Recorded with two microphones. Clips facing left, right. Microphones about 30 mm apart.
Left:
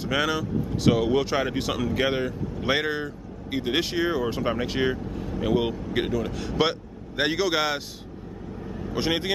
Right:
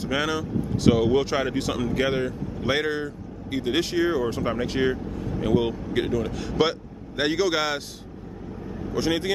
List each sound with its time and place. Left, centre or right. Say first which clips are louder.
0.0 s speech: left 1 dB; centre
8.9 s speech: right 1 dB; centre